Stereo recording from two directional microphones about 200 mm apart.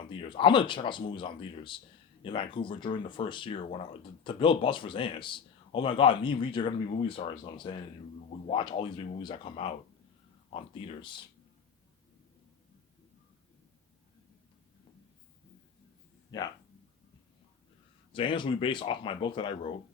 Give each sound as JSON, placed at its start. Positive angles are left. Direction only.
{"t": 0.1, "sound": "speech", "side_deg": 25}
{"t": 18.1, "sound": "speech", "side_deg": 25}